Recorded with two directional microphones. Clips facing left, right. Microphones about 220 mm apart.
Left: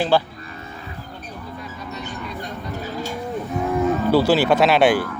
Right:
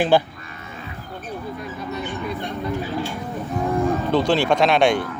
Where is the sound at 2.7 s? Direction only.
40° left (ahead or behind).